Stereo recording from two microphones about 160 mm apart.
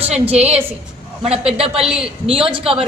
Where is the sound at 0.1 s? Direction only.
40° right (ahead or behind).